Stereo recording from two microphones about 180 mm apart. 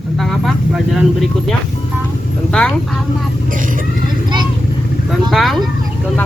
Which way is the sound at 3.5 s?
50° right (ahead or behind).